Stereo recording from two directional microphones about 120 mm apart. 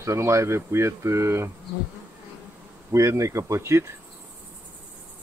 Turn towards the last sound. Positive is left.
turn(degrees=-20)  # may be behind; listen again after turning